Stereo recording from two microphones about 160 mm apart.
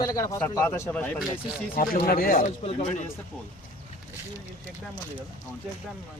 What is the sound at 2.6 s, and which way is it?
Speech, 45° left (ahead or behind).